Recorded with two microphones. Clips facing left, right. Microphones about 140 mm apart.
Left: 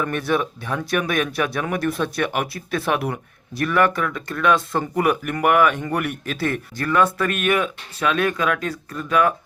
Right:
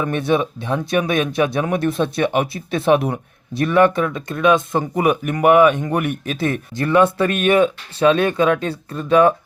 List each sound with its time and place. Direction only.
0.0 s speech: 20° right (ahead or behind)